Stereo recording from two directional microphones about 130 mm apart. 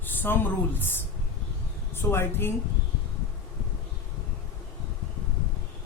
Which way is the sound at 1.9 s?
20° left (ahead or behind).